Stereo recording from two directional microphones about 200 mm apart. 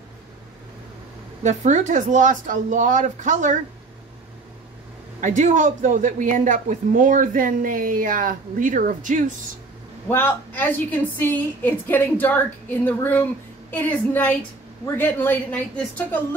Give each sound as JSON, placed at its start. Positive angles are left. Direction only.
{"t": 1.4, "sound": "speech", "side_deg": -35}
{"t": 5.2, "sound": "speech", "side_deg": -40}
{"t": 10.0, "sound": "a woman's voice", "side_deg": 10}